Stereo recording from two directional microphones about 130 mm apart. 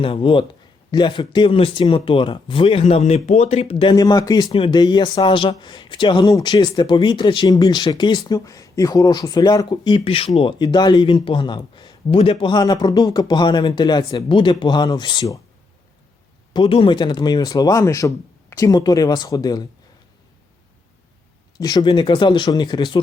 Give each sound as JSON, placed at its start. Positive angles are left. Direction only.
{"t": 0.0, "sound": "speech", "side_deg": 45}
{"t": 3.9, "sound": "a man's voice", "side_deg": 30}
{"t": 16.5, "sound": "a man's voice", "side_deg": 40}
{"t": 21.6, "sound": "a man's voice", "side_deg": 30}